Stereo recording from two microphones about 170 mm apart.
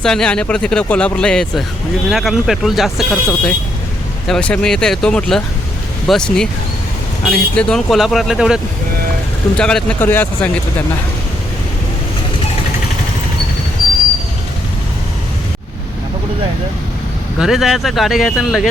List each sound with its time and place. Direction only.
0.0 s speech: 5° left (ahead or behind)
17.4 s speech: 5° right (ahead or behind)